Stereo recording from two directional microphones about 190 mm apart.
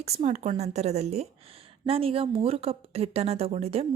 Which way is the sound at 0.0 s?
35° right (ahead or behind).